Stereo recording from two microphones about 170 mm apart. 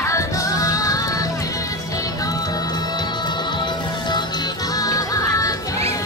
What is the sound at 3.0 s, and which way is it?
Music, 25° left (ahead or behind).